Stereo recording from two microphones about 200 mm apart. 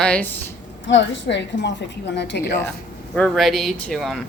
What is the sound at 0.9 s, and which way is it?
A woman's voice, 65° left (ahead or behind).